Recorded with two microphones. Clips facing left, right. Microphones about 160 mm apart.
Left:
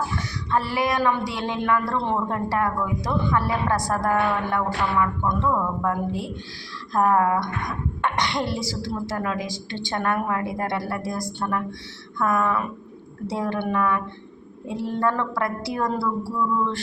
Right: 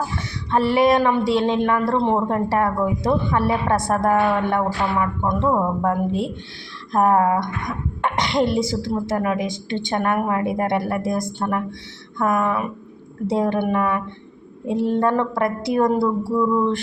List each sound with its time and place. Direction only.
0.2 s a woman's voice: 25° right (ahead or behind)